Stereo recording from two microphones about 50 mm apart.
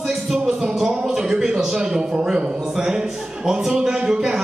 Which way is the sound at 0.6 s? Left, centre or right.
Centre.